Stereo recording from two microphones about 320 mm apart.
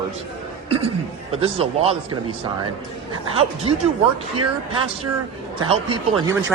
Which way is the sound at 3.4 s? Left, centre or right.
Centre.